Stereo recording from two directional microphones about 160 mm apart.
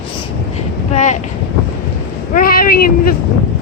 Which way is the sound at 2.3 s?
65° left (ahead or behind).